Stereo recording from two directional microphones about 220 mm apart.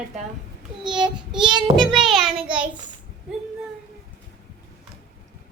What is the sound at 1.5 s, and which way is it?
Speech, 20° right (ahead or behind).